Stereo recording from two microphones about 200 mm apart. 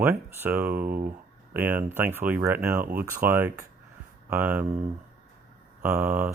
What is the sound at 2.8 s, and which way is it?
Speech, 45° right (ahead or behind).